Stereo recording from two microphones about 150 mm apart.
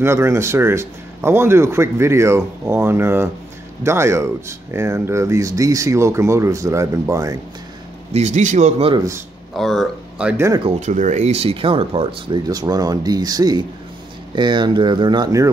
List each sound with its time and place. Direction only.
0.0 s speech: 15° right (ahead or behind)
8.1 s a man's voice: 50° right (ahead or behind)
8.9 s speech: 20° right (ahead or behind)
9.6 s speech: centre (ahead or behind)
10.3 s speech: 20° right (ahead or behind)
10.8 s speech: 55° right (ahead or behind); by 12.4 s 40° right (ahead or behind)
12.4 s speech: 25° right (ahead or behind)